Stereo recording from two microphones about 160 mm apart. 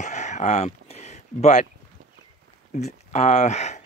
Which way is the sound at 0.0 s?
45° left (ahead or behind).